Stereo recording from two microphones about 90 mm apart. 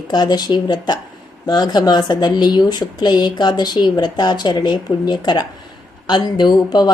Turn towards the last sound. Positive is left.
turn(degrees=55)  # may be behind; listen again after turning